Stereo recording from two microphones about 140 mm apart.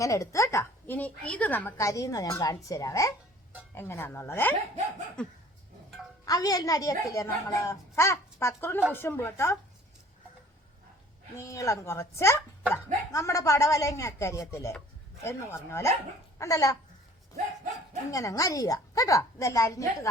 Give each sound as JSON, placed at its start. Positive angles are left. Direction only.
{"t": 0.0, "sound": "a woman's voice", "side_deg": 25}
{"t": 6.2, "sound": "a woman's voice", "side_deg": 25}
{"t": 11.3, "sound": "a woman's voice", "side_deg": 20}
{"t": 18.1, "sound": "a woman's voice", "side_deg": 25}